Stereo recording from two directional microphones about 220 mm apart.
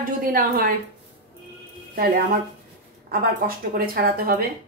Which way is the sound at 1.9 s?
40° right (ahead or behind).